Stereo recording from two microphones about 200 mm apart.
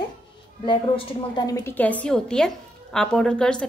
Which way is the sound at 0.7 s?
20° left (ahead or behind).